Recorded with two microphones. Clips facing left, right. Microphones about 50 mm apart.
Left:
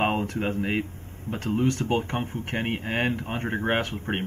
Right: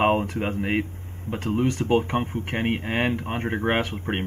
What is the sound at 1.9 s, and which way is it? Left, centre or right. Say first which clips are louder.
Speech: right 4 dB; right.